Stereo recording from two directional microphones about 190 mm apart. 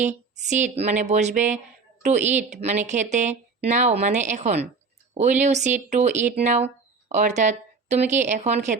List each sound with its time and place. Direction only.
0.0 s a woman's voice: 40° right (ahead or behind)